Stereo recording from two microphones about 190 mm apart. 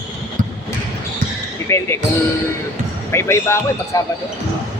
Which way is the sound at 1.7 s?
15° left (ahead or behind).